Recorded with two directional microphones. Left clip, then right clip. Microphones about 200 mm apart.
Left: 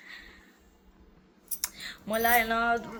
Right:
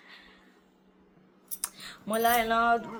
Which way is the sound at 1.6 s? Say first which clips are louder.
Left 3 dB; 10° right (ahead or behind).